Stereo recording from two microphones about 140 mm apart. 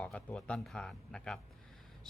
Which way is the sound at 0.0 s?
10° left (ahead or behind).